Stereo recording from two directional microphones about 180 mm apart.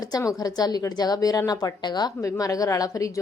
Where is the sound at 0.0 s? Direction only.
20° left (ahead or behind).